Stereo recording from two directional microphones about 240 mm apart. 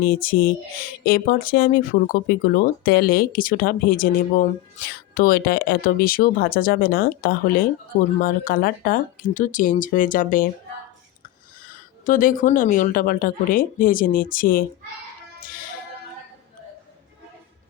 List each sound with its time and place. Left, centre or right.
0.0 s speech: left
12.0 s speech: left